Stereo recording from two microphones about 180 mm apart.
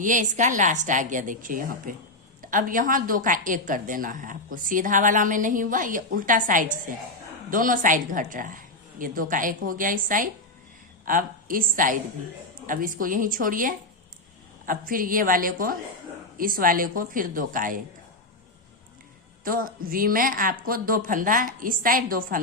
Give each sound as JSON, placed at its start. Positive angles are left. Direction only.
{"t": 0.0, "sound": "a woman's voice", "side_deg": -45}
{"t": 19.5, "sound": "a woman's voice", "side_deg": -50}